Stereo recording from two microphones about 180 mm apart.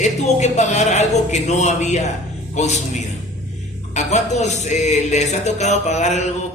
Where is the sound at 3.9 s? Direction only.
40° left (ahead or behind).